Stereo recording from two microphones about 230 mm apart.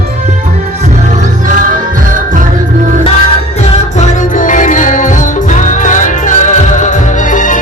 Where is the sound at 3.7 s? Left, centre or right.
Left.